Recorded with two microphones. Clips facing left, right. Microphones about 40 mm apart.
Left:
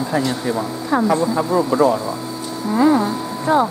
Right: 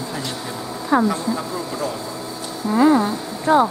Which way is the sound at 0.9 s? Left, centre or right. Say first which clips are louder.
Right 1 dB; centre.